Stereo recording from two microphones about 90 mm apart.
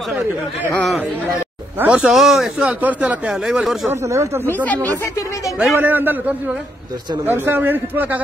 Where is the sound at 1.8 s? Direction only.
10° right (ahead or behind).